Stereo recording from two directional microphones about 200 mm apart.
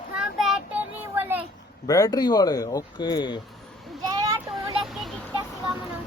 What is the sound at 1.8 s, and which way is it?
Speech, 15° left (ahead or behind).